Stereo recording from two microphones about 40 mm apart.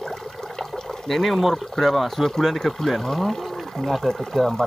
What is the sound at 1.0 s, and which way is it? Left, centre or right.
Speech, centre.